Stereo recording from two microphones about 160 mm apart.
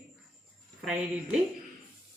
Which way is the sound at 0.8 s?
5° right (ahead or behind).